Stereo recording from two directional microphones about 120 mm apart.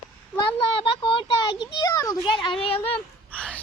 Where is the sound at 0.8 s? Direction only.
45° left (ahead or behind); by 2.1 s 30° left (ahead or behind).